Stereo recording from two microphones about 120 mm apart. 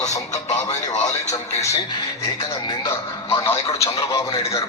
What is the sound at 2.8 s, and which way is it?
Speech, 20° left (ahead or behind).